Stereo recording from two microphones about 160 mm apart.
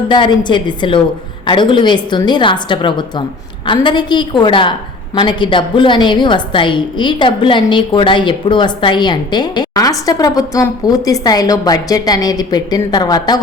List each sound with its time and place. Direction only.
0.1 s a woman's voice: 30° left (ahead or behind)